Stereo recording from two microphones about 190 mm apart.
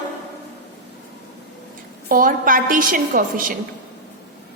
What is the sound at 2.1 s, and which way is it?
A woman's voice, 45° right (ahead or behind).